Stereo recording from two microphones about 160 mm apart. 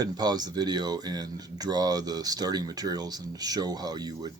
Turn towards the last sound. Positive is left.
turn(degrees=-25)  # may be behind; listen again after turning